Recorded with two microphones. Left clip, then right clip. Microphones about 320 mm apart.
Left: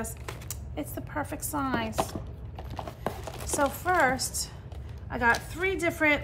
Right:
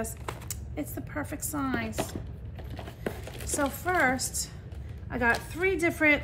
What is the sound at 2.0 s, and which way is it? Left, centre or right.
Typing, centre.